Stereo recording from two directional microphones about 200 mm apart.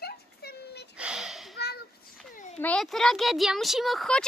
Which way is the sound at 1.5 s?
55° left (ahead or behind).